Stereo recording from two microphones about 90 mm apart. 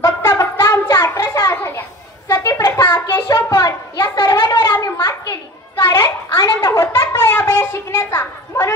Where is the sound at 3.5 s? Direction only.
40° left (ahead or behind).